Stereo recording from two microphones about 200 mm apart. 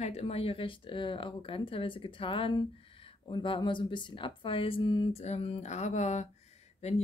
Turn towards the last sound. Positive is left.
turn(degrees=30)  # may be behind; listen again after turning